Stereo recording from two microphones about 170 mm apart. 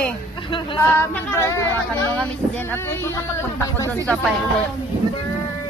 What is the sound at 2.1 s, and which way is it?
Speech, 5° left (ahead or behind).